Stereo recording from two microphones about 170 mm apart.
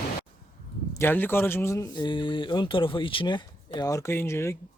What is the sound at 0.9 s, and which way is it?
Speech, 15° left (ahead or behind).